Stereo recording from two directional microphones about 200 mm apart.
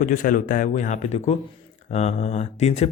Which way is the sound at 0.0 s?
40° left (ahead or behind).